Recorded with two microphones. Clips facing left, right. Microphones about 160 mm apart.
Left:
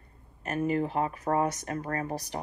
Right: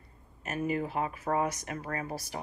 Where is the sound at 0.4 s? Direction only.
40° left (ahead or behind).